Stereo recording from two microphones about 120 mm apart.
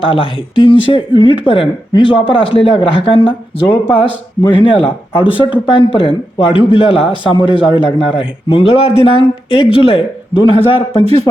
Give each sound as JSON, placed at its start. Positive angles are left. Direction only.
{"t": 0.0, "sound": "a man's voice", "side_deg": 45}